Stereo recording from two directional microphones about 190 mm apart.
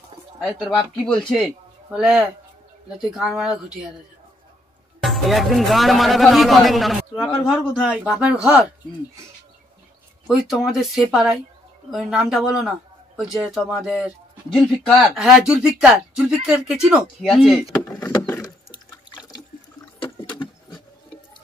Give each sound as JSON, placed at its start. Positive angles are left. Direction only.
{"t": 0.4, "sound": "speech", "side_deg": 0}
{"t": 5.0, "sound": "speech", "side_deg": 0}
{"t": 10.2, "sound": "a man's voice", "side_deg": 0}
{"t": 17.8, "sound": "a sound", "side_deg": 20}
{"t": 19.1, "sound": "toilet flush", "side_deg": 20}
{"t": 20.0, "sound": "a sound", "side_deg": 25}